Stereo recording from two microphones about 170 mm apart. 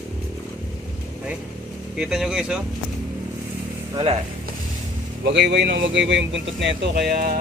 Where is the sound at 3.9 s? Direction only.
30° right (ahead or behind).